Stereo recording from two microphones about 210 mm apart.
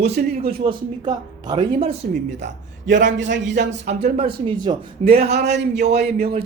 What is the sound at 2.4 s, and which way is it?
A man's voice, 55° right (ahead or behind).